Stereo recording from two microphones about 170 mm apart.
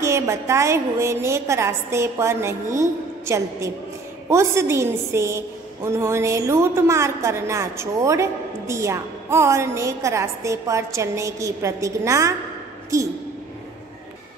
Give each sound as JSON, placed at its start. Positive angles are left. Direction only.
{"t": 0.0, "sound": "a woman's voice", "side_deg": -15}